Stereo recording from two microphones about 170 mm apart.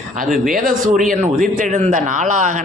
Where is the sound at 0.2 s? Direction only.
50° right (ahead or behind).